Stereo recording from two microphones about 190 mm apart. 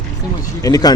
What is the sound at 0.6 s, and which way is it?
Speech, 20° left (ahead or behind).